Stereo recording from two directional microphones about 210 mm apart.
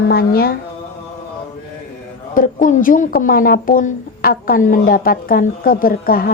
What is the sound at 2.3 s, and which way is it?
Speech, 40° left (ahead or behind).